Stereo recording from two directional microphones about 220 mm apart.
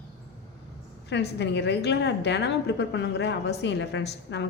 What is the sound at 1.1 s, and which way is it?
A woman's voice, 50° left (ahead or behind).